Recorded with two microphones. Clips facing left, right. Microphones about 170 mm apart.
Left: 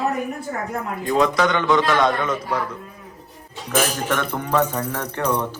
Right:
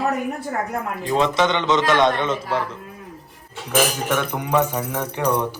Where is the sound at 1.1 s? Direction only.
25° right (ahead or behind).